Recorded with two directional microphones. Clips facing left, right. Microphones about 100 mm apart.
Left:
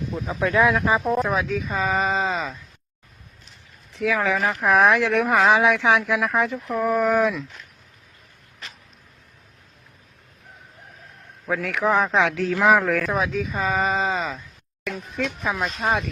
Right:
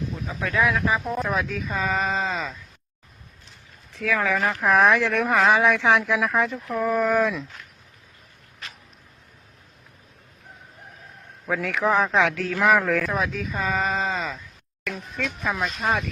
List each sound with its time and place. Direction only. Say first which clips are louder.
0.3 s speech: left 4 dB; 25° left (ahead or behind)
1.2 s speech: left 3 dB; centre (ahead or behind)
3.9 s speech: left 2 dB; 10° left (ahead or behind)
11.4 s speech: left 1 dB; centre (ahead or behind)
11.7 s speech: left 1 dB; 10° left (ahead or behind)
12.8 s speech: left 1 dB; centre (ahead or behind)
14.8 s a sound: left 2 dB; centre (ahead or behind)
15.4 s speech: even; centre (ahead or behind)